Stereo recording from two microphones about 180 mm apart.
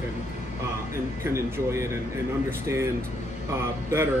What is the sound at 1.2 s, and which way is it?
Speech, 15° right (ahead or behind).